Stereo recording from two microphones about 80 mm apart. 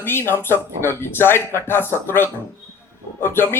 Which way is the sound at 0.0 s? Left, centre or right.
Left.